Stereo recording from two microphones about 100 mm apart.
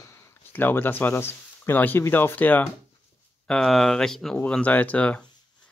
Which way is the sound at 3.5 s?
5° left (ahead or behind).